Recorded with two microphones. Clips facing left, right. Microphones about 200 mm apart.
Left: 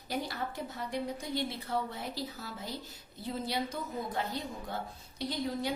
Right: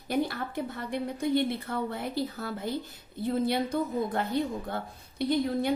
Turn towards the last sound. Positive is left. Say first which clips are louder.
# right 7 dB
turn(degrees=-55)  # may be behind; listen again after turning